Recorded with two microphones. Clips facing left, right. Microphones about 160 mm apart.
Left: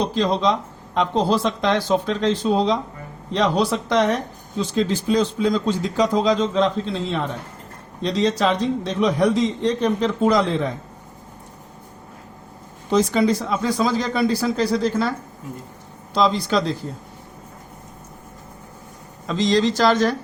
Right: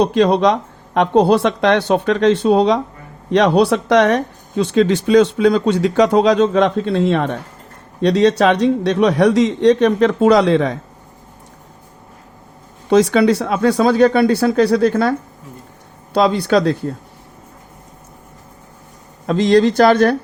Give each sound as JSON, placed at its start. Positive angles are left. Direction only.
{"t": 0.0, "sound": "speech", "side_deg": -65}
{"t": 12.9, "sound": "speech", "side_deg": -80}
{"t": 16.1, "sound": "speech", "side_deg": -65}
{"t": 19.2, "sound": "speech", "side_deg": -55}